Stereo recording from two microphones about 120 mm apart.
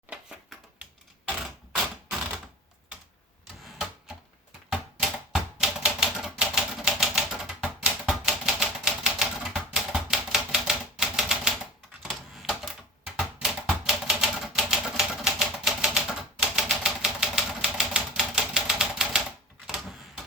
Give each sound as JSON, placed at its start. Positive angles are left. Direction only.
{"t": 3.4, "sound": "printer", "side_deg": 0}
{"t": 4.7, "sound": "typewriter", "side_deg": 0}
{"t": 19.6, "sound": "a sound", "side_deg": 0}